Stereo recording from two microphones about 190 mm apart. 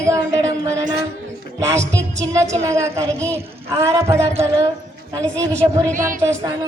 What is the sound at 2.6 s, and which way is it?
A woman's voice, 15° right (ahead or behind).